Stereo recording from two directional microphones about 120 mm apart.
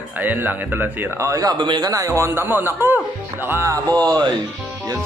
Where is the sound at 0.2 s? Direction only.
15° right (ahead or behind).